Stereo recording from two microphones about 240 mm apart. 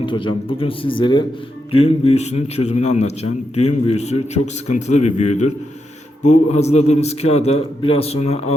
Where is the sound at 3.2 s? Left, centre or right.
Left.